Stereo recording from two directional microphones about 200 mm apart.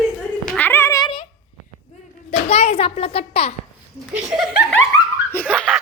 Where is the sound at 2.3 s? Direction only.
30° left (ahead or behind).